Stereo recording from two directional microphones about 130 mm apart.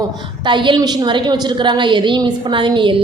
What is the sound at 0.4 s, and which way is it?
A woman's voice, 40° right (ahead or behind).